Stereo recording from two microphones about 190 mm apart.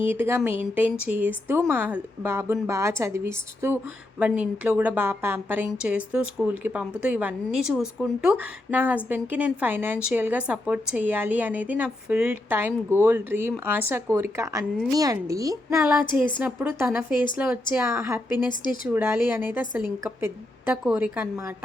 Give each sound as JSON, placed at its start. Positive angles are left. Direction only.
{"t": 0.0, "sound": "a woman's voice", "side_deg": -10}
{"t": 18.4, "sound": "speech", "side_deg": 25}
{"t": 18.9, "sound": "a woman's voice", "side_deg": -10}